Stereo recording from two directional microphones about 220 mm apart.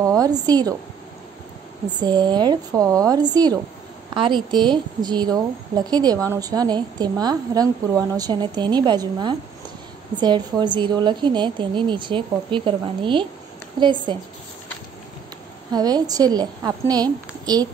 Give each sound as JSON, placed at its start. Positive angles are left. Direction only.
{"t": 0.2, "sound": "a woman's voice", "side_deg": -20}
{"t": 2.0, "sound": "a woman's voice", "side_deg": -20}
{"t": 15.7, "sound": "a woman's voice", "side_deg": -15}